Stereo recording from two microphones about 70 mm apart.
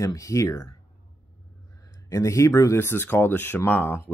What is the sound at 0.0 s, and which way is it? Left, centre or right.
Speech, left.